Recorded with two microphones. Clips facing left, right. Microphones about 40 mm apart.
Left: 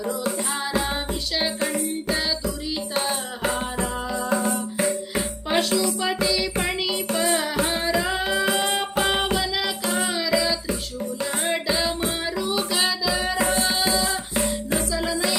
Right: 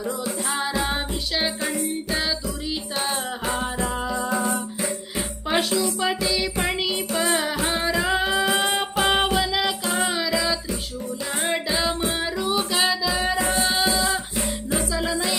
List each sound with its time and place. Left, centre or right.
1.4 s music: centre
4.4 s music: centre